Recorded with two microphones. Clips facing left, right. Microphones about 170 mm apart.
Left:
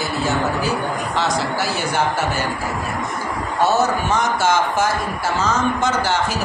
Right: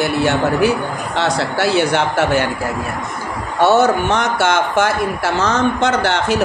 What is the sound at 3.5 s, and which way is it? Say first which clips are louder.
A man's voice: right 5 dB; 70° right (ahead or behind).